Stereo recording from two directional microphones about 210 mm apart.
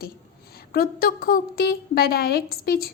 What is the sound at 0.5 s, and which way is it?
A woman's voice, 45° left (ahead or behind).